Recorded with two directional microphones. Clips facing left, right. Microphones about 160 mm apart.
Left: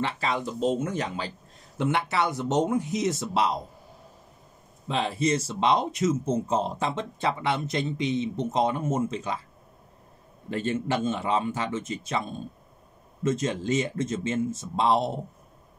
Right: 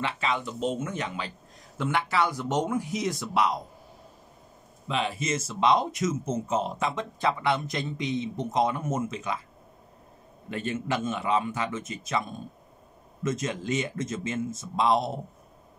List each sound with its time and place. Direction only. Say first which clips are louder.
0.0 s speech: left 1 dB; 35° left (ahead or behind)
1.8 s speech: left 1 dB; 20° left (ahead or behind)
4.8 s speech: left 3 dB; 35° left (ahead or behind)
10.5 s speech: left 3 dB; 30° left (ahead or behind)
13.2 s speech: left 3 dB; 30° left (ahead or behind)